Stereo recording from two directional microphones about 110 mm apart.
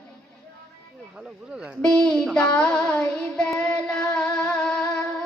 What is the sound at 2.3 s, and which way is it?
Child singing, 10° left (ahead or behind).